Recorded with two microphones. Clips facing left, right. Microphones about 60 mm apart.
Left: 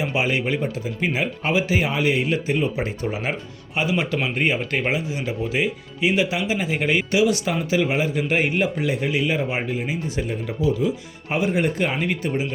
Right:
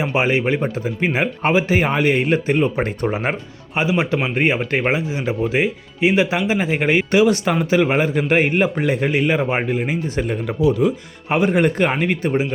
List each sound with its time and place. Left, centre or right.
0.0 s speech: right
3.8 s a man's voice: right